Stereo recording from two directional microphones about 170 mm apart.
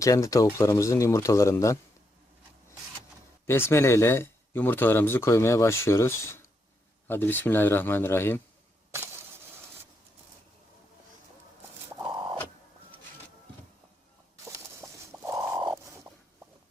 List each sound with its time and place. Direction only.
0.0 s speech: 20° left (ahead or behind)
3.4 s speech: 15° left (ahead or behind)
12.1 s bird: 30° right (ahead or behind)
14.4 s a sound: 15° right (ahead or behind)